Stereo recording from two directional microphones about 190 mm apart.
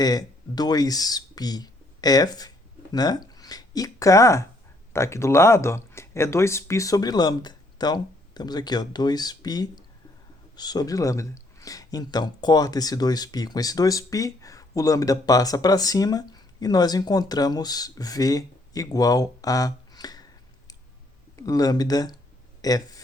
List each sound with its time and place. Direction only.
0.0 s speech: 20° left (ahead or behind)
21.3 s speech: 20° left (ahead or behind)